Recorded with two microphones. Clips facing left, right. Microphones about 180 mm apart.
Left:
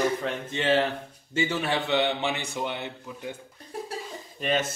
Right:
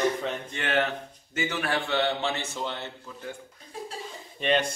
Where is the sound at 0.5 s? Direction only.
25° left (ahead or behind).